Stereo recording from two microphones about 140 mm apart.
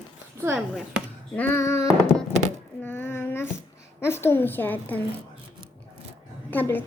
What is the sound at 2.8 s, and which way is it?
A child's voice, 15° left (ahead or behind).